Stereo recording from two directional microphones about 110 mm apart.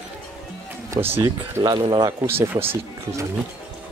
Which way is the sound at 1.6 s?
50° right (ahead or behind).